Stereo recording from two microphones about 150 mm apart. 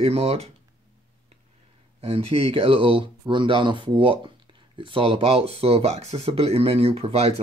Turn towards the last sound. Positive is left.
turn(degrees=-45)  # may be behind; listen again after turning